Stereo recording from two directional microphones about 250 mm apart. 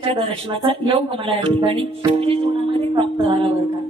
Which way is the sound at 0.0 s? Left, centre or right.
Right.